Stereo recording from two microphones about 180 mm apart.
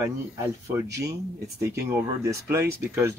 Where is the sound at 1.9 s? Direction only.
15° right (ahead or behind).